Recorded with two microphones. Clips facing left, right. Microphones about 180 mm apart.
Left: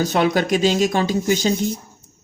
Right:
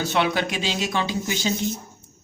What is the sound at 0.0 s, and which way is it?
Speech, 40° left (ahead or behind).